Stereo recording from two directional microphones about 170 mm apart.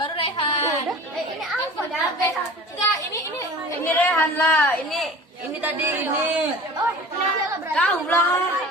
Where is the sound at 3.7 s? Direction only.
10° left (ahead or behind).